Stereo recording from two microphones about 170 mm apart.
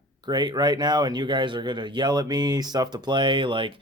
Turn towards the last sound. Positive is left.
turn(degrees=-30)  # may be behind; listen again after turning